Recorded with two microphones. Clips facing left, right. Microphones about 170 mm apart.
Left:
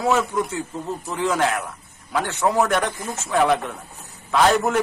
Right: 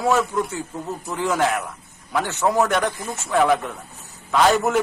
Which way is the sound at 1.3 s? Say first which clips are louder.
Right 1 dB; 10° right (ahead or behind).